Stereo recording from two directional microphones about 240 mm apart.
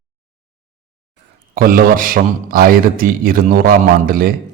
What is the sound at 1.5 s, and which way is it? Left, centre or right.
A man's voice, right.